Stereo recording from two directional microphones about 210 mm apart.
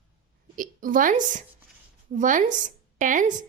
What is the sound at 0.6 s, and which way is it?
A woman's voice, 40° right (ahead or behind).